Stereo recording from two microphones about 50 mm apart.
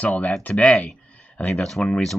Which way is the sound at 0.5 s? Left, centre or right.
Centre.